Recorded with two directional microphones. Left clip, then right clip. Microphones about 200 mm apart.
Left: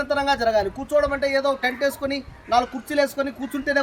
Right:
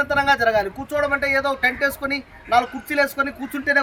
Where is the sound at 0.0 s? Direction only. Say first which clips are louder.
Right 3 dB; 10° left (ahead or behind).